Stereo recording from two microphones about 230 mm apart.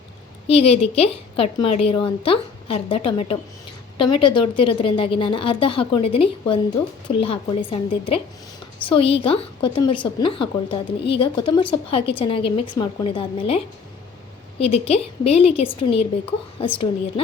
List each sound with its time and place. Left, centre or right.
0.4 s a woman's voice: left
14.6 s a woman's voice: left